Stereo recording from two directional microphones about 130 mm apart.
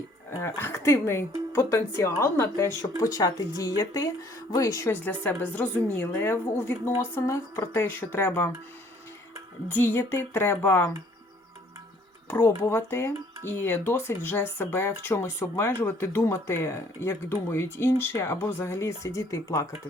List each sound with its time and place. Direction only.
0.3 s speech: 20° left (ahead or behind)
5.0 s a woman's voice: 15° left (ahead or behind)
9.6 s a woman's voice: 20° left (ahead or behind)
12.3 s speech: 15° left (ahead or behind)